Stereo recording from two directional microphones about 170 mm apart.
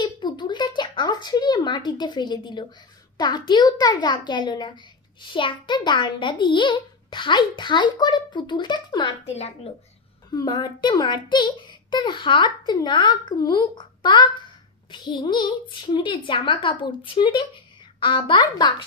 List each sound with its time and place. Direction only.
0.0 s a sound: 25° left (ahead or behind)
3.2 s a child's voice: 25° left (ahead or behind)
10.3 s a child's voice: 25° left (ahead or behind)